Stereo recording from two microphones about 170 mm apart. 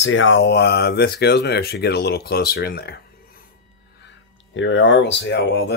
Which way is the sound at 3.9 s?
90° left.